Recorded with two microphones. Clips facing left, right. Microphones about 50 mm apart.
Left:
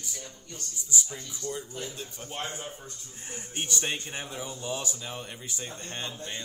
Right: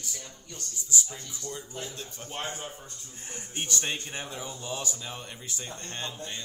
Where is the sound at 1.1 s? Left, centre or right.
Centre.